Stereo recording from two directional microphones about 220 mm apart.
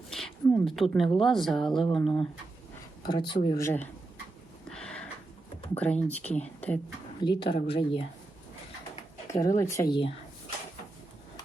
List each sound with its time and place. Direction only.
0.1 s a sound: centre (ahead or behind)
0.4 s speech: centre (ahead or behind)
3.1 s speech: 15° left (ahead or behind)
4.7 s a sound: 5° left (ahead or behind)
5.7 s speech: 5° left (ahead or behind)
7.2 s speech: 20° left (ahead or behind)
9.6 s speech: 15° left (ahead or behind)